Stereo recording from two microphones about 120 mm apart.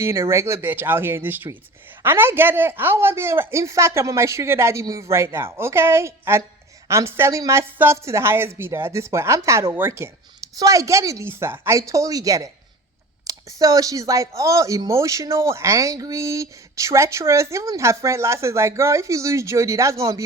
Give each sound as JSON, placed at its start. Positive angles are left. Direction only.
{"t": 0.0, "sound": "speech", "side_deg": -20}